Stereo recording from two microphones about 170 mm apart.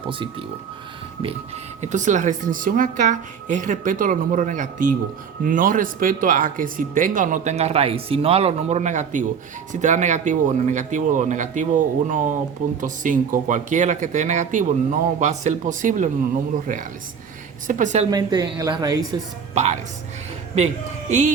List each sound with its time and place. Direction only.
0.1 s speech: 30° right (ahead or behind)
1.8 s speech: 45° right (ahead or behind)
17.7 s speech: 45° right (ahead or behind)
18.1 s a woman's voice: 25° right (ahead or behind)
19.6 s speech: 40° right (ahead or behind)
21.1 s speech: 45° right (ahead or behind)